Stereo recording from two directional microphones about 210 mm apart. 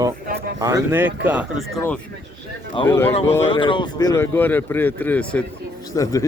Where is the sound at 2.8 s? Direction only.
10° left (ahead or behind).